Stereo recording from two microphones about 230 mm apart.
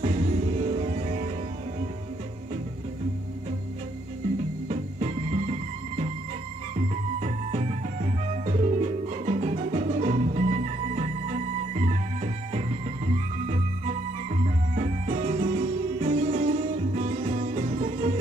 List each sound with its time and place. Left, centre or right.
0.0 s music: right
4.6 s music: right
7.2 s music: right